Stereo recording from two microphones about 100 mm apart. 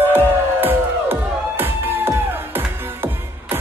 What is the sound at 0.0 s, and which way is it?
Music, 20° right (ahead or behind).